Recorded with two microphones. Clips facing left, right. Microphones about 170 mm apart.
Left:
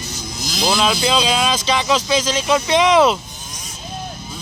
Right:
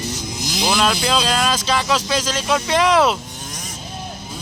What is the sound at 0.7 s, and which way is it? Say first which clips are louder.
Speech: left 1 dB; centre (ahead or behind).